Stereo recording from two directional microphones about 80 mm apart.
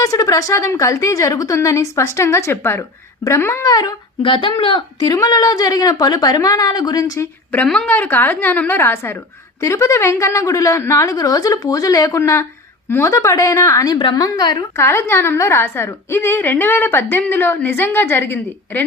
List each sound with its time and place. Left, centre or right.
0.0 s a woman's voice: left
3.7 s a woman's voice: left
4.2 s speech: left
4.9 s a woman's voice: left
7.0 s a woman's voice: left
7.9 s a woman's voice: left
14.2 s a woman's voice: left
14.8 s a woman's voice: left